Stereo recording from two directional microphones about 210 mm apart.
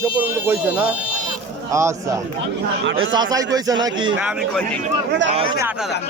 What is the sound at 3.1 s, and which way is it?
Speech, 20° right (ahead or behind).